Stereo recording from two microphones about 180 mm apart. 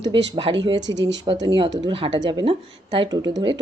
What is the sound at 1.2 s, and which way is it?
A woman's voice, 25° right (ahead or behind).